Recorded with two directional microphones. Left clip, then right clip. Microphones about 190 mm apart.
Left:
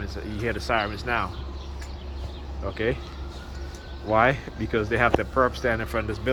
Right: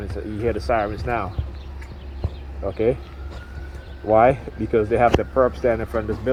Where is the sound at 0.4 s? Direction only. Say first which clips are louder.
Right 4 dB; 40° right (ahead or behind).